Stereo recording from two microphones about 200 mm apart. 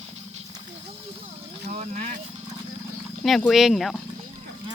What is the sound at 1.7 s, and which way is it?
Speech, 35° right (ahead or behind).